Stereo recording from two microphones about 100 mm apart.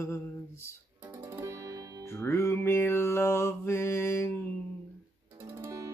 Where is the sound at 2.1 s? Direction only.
25° left (ahead or behind).